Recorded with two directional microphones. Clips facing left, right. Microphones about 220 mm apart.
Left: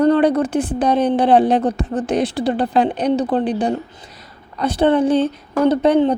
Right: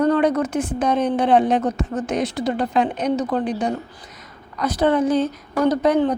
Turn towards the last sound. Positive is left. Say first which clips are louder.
# left 3 dB
turn(degrees=25)  # may be behind; listen again after turning